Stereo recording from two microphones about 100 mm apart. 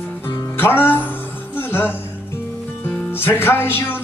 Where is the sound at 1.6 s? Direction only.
20° left (ahead or behind).